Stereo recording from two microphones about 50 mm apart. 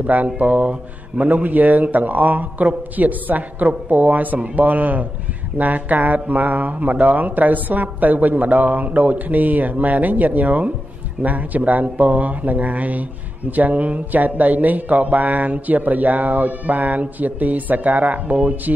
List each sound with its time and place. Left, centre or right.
0.0 s speech: right